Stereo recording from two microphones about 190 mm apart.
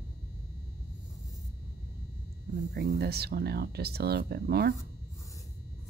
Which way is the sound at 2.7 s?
60° right (ahead or behind).